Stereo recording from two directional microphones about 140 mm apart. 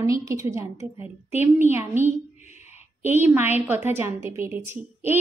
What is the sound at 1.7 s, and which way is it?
Speech, 15° right (ahead or behind).